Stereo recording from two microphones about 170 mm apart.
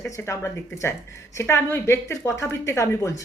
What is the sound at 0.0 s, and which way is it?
A woman's voice, 15° left (ahead or behind).